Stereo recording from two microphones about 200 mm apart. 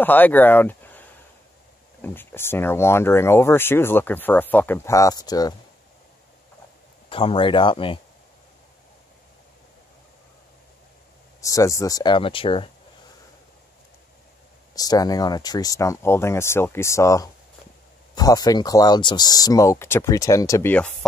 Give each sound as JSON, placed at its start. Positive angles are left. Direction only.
{"t": 0.0, "sound": "speech", "side_deg": 10}
{"t": 7.1, "sound": "speech", "side_deg": 25}
{"t": 11.4, "sound": "speech", "side_deg": 15}
{"t": 14.8, "sound": "speech", "side_deg": 20}